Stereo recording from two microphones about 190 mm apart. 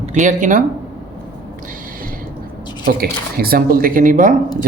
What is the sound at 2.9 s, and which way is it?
Speech, 50° right (ahead or behind).